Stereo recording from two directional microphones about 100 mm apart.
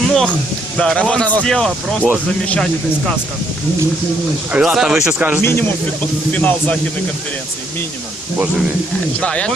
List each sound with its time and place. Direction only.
0.0 s a sound: centre (ahead or behind)
0.8 s speech: 10° left (ahead or behind)
4.5 s speech: 5° right (ahead or behind)
5.4 s speech: 20° left (ahead or behind)
9.2 s speech: 10° left (ahead or behind)